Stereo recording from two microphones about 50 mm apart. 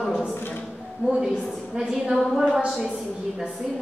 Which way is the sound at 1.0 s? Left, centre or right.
Right.